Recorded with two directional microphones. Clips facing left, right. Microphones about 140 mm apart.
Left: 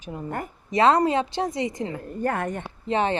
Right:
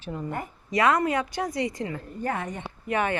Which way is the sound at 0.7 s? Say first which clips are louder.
Left 4 dB; 25° left (ahead or behind).